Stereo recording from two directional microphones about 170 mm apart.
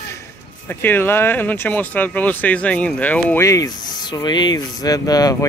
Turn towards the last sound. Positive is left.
turn(degrees=20)  # may be behind; listen again after turning